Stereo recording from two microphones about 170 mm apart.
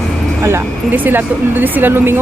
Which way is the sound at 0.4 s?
15° right (ahead or behind).